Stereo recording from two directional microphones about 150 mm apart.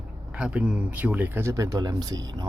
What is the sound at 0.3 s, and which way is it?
Speech, 5° right (ahead or behind).